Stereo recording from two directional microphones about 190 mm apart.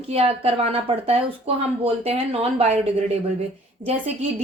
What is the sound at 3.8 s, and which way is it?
Speech, 45° right (ahead or behind).